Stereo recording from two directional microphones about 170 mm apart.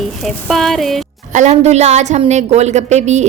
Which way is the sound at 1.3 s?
45° right (ahead or behind).